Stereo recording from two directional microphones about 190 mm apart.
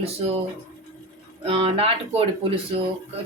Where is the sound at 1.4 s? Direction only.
30° right (ahead or behind).